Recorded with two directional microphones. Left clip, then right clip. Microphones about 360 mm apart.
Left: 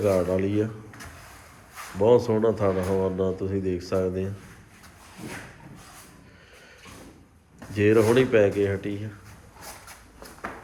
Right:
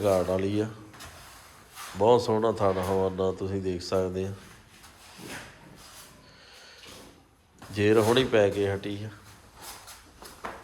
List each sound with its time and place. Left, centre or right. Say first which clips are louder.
0.0 s speech: left 2 dB; centre
2.0 s speech: left 2 dB; centre
7.7 s speech: left 3 dB; centre